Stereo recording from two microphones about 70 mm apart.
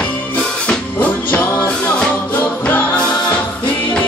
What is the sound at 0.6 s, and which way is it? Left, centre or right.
Music, centre.